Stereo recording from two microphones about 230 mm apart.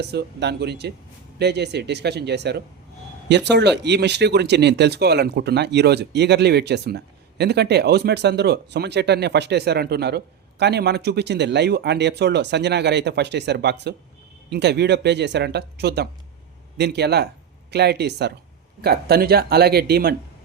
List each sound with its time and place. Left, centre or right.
0.0 s speech: right